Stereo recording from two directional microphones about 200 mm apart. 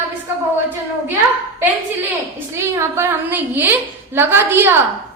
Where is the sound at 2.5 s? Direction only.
15° right (ahead or behind).